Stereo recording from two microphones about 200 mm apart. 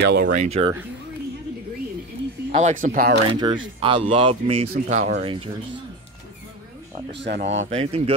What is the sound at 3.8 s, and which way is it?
Speech, 25° right (ahead or behind).